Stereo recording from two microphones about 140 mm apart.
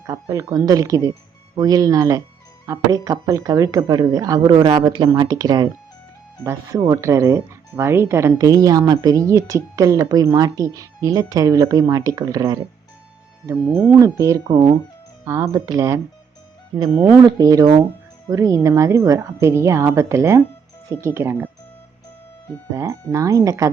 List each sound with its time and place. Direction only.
0.0 s speech: 25° right (ahead or behind)
13.9 s speech: 20° right (ahead or behind)
16.7 s speech: 35° right (ahead or behind); by 21.5 s 15° right (ahead or behind)
22.7 s speech: 20° right (ahead or behind)